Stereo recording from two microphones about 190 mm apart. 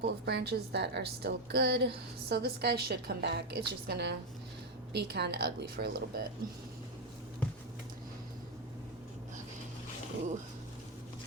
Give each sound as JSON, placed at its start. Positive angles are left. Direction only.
{"t": 0.0, "sound": "a woman's voice", "side_deg": -60}